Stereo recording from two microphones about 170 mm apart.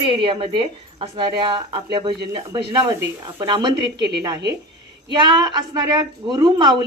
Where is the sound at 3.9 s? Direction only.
85° right.